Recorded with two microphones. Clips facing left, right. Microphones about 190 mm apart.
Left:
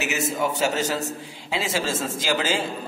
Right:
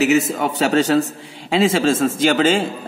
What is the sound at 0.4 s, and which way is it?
A man's voice, 65° right (ahead or behind).